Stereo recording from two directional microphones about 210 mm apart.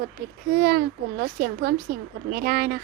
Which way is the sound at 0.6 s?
50° right (ahead or behind).